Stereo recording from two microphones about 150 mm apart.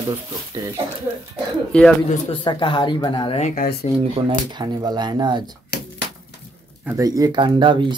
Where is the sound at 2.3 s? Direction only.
35° left (ahead or behind).